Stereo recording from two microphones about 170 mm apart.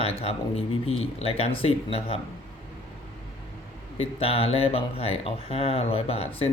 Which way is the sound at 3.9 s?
35° left (ahead or behind).